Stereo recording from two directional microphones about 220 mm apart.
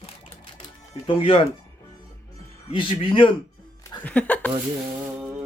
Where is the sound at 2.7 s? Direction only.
25° left (ahead or behind).